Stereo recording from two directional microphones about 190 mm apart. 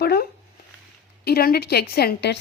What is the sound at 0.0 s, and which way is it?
A woman's voice, 60° left (ahead or behind).